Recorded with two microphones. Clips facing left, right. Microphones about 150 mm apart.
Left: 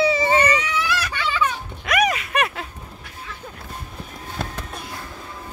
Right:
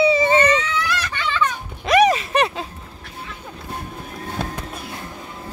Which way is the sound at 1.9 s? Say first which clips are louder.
Right 6 dB; 30° right (ahead or behind).